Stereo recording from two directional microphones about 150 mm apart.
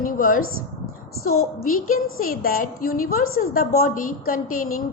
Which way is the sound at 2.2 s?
70° left (ahead or behind).